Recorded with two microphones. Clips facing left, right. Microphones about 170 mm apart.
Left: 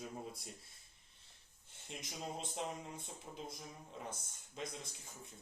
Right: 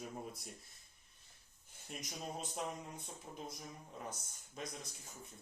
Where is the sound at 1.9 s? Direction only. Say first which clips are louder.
Even; 25° left (ahead or behind).